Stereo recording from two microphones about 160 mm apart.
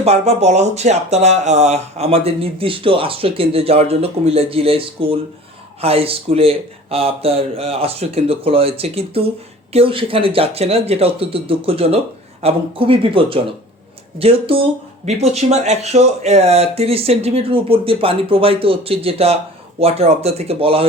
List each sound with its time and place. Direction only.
0.0 s speech: 40° right (ahead or behind)